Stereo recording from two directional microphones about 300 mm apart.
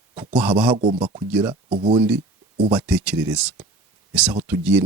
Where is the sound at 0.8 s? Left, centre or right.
Centre.